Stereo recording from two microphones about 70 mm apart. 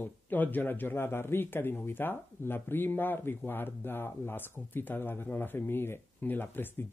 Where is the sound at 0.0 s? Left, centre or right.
Left.